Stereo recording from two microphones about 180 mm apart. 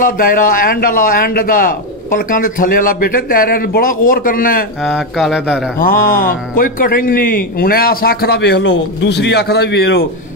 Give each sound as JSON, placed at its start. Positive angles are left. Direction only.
{"t": 0.0, "sound": "a man's voice", "side_deg": 50}
{"t": 4.8, "sound": "speech", "side_deg": 0}
{"t": 5.8, "sound": "a man's voice", "side_deg": 55}